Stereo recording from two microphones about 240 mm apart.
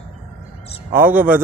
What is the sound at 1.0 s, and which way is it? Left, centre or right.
Speech, centre.